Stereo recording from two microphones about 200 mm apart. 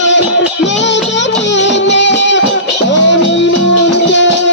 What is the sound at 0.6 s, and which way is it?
Music, 65° left (ahead or behind).